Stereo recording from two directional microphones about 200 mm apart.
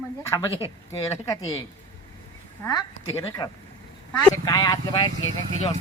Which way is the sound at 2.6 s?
20° left (ahead or behind).